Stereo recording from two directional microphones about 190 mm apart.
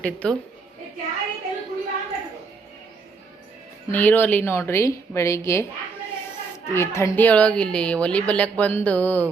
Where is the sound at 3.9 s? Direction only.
10° left (ahead or behind).